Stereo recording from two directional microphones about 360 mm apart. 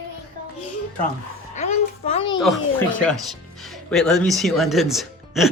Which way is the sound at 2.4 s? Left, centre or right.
Centre.